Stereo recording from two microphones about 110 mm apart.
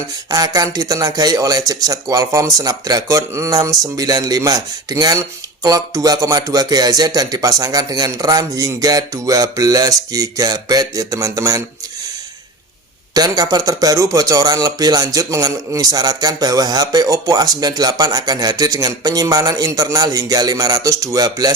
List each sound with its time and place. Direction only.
0.3 s speech: 35° right (ahead or behind)
13.1 s speech: 35° right (ahead or behind)